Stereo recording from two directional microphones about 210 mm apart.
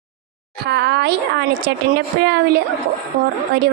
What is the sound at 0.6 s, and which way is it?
A woman's voice, 55° right (ahead or behind).